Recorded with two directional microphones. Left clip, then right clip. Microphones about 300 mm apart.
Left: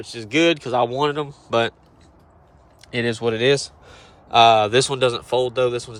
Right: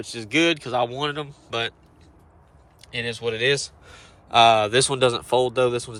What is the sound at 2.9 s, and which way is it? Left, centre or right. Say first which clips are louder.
Speech: left 5 dB; left.